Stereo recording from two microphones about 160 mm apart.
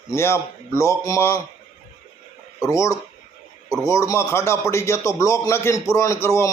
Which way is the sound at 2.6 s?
20° left (ahead or behind).